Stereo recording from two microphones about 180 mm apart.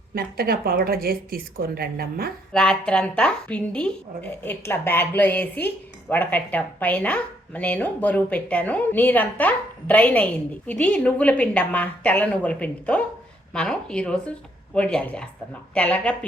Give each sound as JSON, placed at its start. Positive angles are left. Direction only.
{"t": 0.1, "sound": "speech", "side_deg": -55}
{"t": 2.5, "sound": "a woman's voice", "side_deg": 5}